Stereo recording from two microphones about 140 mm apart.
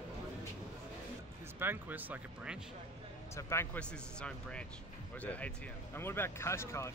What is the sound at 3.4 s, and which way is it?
Speech, 20° left (ahead or behind).